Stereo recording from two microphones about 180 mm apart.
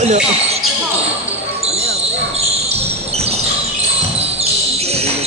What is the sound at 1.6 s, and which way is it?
Basketball bounce, 35° right (ahead or behind).